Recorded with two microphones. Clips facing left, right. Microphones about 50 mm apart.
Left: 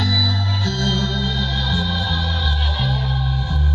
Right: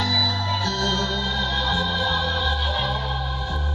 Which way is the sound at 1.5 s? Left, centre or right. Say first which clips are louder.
Even; centre.